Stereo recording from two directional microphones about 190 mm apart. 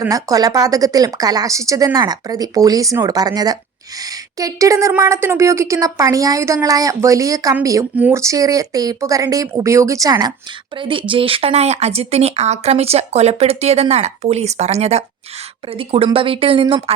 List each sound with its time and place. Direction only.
0.0 s a woman's voice: 20° right (ahead or behind)